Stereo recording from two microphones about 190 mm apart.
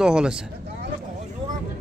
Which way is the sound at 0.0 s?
5° right (ahead or behind).